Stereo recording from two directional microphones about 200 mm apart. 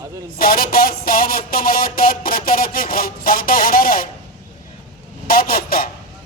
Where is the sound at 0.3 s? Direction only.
45° left (ahead or behind).